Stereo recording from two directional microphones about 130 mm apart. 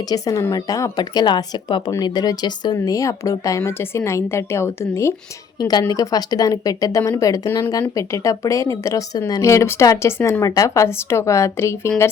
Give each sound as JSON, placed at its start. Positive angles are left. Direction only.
{"t": 0.0, "sound": "speech", "side_deg": 30}
{"t": 5.5, "sound": "a woman's voice", "side_deg": 30}